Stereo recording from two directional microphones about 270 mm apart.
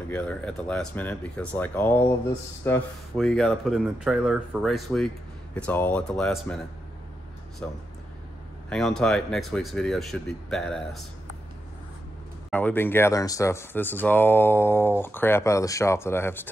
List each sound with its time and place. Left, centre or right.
0.1 s speech: centre
8.6 s speech: centre
12.4 s speech: centre